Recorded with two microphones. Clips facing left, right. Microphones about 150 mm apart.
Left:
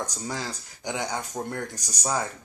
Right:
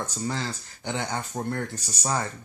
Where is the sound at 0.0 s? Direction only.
10° left (ahead or behind).